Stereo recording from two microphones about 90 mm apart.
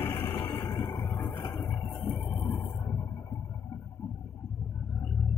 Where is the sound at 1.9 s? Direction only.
20° left (ahead or behind).